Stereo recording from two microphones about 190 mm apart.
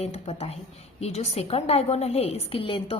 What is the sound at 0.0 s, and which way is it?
A woman's voice, 35° left (ahead or behind).